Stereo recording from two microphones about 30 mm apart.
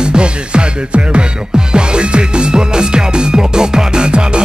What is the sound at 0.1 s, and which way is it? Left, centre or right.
Music, right.